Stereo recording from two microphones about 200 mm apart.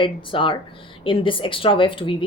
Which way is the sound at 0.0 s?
25° left (ahead or behind).